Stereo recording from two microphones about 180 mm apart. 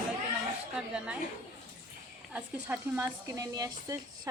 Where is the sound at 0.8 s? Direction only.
5° right (ahead or behind).